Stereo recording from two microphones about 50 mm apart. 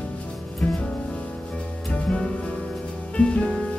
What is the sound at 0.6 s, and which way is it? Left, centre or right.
Music, centre.